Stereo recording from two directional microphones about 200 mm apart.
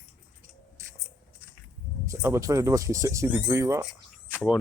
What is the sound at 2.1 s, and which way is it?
Speech, 15° right (ahead or behind).